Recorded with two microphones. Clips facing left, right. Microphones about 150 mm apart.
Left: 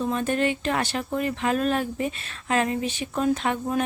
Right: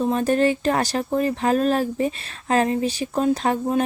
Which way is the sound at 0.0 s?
35° right (ahead or behind).